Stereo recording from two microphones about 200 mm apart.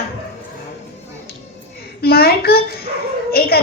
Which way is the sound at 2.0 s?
50° left (ahead or behind).